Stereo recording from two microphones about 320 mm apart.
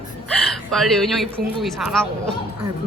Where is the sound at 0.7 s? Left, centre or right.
Centre.